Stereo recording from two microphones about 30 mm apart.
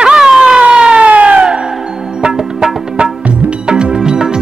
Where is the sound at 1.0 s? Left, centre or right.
Right.